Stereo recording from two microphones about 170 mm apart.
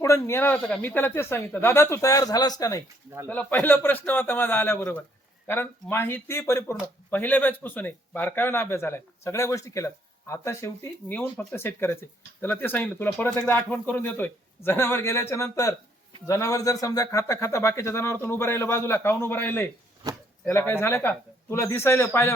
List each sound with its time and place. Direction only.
0.0 s speech: 15° left (ahead or behind)
3.2 s speech: 10° left (ahead or behind)